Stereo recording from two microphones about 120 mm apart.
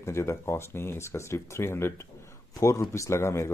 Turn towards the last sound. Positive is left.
turn(degrees=25)  # may be behind; listen again after turning